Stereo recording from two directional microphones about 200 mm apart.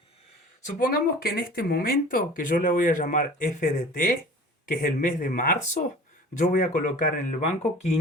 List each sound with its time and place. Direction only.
0.6 s speech: 45° left (ahead or behind)